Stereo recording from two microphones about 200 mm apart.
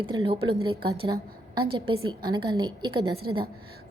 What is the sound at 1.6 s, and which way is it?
A woman's voice, 25° right (ahead or behind).